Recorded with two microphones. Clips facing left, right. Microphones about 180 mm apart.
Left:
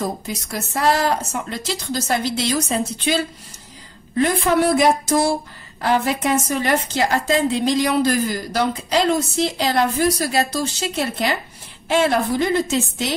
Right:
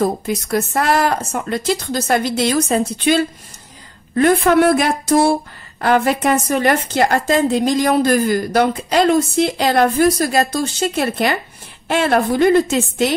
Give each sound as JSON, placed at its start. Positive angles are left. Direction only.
{"t": 0.0, "sound": "a woman's voice", "side_deg": -60}
{"t": 4.2, "sound": "a woman's voice", "side_deg": -60}